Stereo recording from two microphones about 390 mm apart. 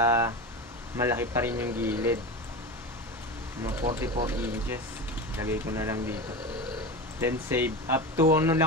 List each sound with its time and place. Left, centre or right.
0.0 s a sound: centre
0.9 s speech: centre
3.6 s speech: centre
7.2 s speech: centre